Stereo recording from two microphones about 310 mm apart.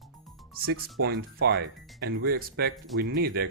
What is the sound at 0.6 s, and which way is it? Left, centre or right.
Speech, right.